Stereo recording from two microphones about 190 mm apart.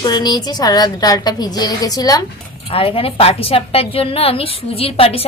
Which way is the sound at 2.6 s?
30° left (ahead or behind).